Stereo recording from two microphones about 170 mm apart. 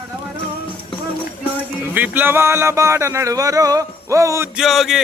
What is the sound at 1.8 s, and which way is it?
Speech, 10° right (ahead or behind).